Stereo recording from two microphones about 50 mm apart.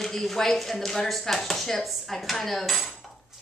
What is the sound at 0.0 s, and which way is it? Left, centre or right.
Speech, centre.